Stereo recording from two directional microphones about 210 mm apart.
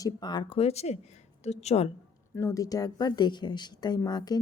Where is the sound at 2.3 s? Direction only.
15° left (ahead or behind).